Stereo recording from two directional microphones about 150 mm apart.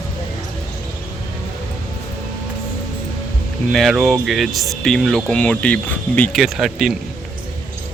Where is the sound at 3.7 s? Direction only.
Centre (ahead or behind).